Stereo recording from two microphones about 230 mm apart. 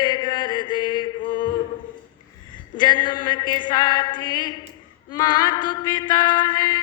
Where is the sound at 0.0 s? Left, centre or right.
Centre.